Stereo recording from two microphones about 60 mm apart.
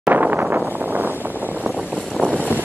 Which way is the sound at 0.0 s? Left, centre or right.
Right.